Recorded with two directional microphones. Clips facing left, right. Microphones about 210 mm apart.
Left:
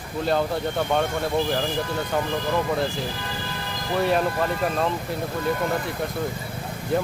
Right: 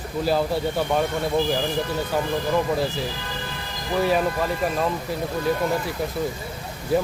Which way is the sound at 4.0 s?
Centre (ahead or behind).